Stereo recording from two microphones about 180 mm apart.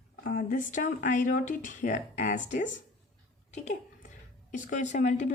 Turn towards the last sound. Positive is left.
turn(degrees=40)  # may be behind; listen again after turning